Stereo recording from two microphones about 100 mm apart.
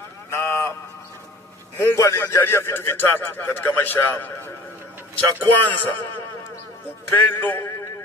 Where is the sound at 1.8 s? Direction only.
25° left (ahead or behind).